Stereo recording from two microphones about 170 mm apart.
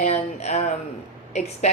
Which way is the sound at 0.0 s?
40° left (ahead or behind).